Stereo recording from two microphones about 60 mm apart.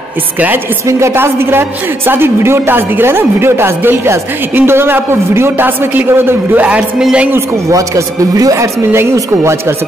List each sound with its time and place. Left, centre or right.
0.8 s speech: right
1.1 s a woman's voice: right
7.0 s a woman's voice: centre
7.7 s a man's voice: right
9.1 s speech: right